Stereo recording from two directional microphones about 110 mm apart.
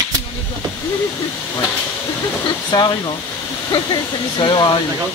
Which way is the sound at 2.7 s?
40° left (ahead or behind).